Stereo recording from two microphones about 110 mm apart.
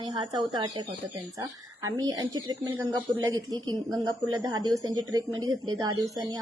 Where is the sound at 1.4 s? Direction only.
30° right (ahead or behind).